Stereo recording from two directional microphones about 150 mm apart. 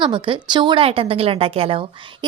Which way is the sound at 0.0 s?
35° right (ahead or behind).